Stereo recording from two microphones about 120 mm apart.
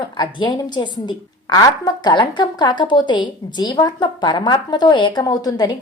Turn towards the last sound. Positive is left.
turn(degrees=35)  # may be behind; listen again after turning